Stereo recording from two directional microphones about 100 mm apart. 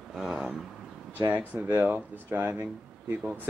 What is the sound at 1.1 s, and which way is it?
Speech, 15° right (ahead or behind).